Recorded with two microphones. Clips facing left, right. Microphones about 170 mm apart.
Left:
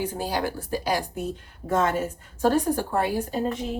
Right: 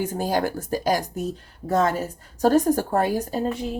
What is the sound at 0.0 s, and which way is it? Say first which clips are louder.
Speech: right 3 dB; 45° right (ahead or behind).